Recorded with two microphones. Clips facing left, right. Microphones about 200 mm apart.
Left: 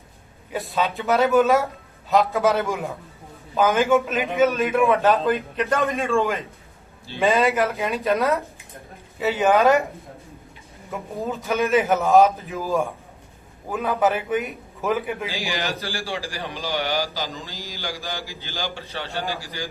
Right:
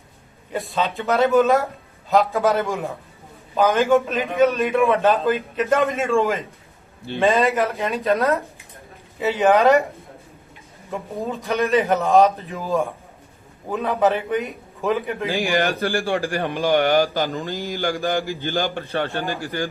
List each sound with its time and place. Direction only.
0.5 s a man's voice: centre (ahead or behind)
10.9 s a man's voice: centre (ahead or behind)
15.3 s a man's voice: 55° right (ahead or behind)